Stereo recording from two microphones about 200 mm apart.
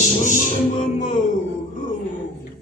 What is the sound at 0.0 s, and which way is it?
Speech, 40° left (ahead or behind).